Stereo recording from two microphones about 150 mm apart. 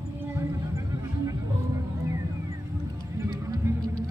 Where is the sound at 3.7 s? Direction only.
15° right (ahead or behind).